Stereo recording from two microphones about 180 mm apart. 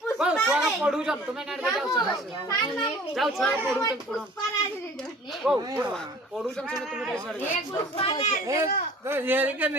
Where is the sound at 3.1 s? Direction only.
Centre (ahead or behind).